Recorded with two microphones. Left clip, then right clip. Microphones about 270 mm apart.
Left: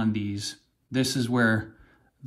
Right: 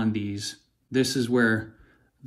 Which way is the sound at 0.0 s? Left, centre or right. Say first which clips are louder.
Even; centre.